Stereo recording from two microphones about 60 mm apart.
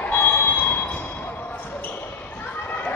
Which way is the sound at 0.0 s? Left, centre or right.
Left.